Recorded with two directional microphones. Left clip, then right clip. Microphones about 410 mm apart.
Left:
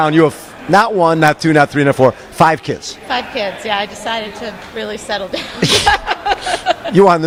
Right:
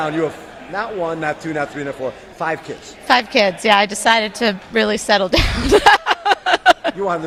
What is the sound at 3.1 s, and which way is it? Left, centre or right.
A woman's voice, right.